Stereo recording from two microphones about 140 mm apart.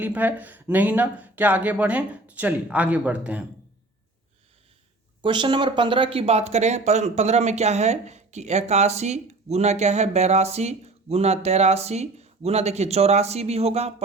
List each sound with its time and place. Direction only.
0.0 s speech: 10° right (ahead or behind)
5.2 s speech: 35° right (ahead or behind)